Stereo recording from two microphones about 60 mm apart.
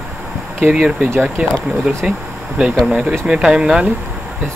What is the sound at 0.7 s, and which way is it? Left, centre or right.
Speech, centre.